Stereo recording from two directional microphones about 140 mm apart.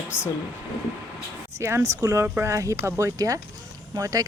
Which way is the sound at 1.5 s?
20° right (ahead or behind).